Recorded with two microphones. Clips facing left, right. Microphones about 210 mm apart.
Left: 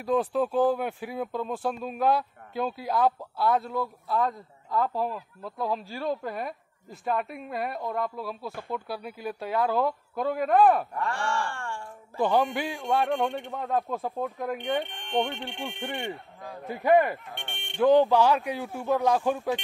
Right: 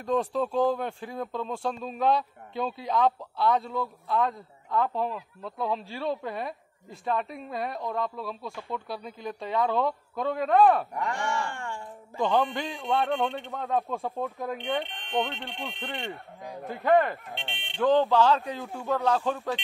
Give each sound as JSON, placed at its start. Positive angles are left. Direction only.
{"t": 0.0, "sound": "a man's voice", "side_deg": 5}
{"t": 11.0, "sound": "speech", "side_deg": -20}
{"t": 12.2, "sound": "a man's voice", "side_deg": 10}
{"t": 15.8, "sound": "a man's voice", "side_deg": 15}
{"t": 17.5, "sound": "speech", "side_deg": 50}
{"t": 17.7, "sound": "a man's voice", "side_deg": 10}